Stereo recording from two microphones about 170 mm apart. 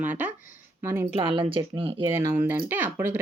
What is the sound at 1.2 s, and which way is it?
Speech, 30° right (ahead or behind).